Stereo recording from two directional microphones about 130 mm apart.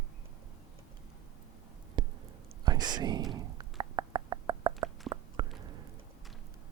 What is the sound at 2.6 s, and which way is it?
Whispering, 30° right (ahead or behind).